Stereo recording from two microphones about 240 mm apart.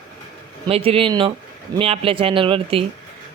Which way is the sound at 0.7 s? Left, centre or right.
Right.